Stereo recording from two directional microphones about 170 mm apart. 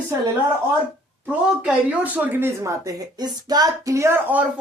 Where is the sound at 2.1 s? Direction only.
15° right (ahead or behind).